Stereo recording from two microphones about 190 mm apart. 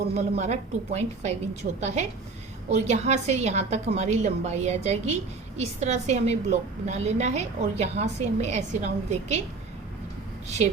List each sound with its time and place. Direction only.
0.2 s a woman's voice: 35° right (ahead or behind)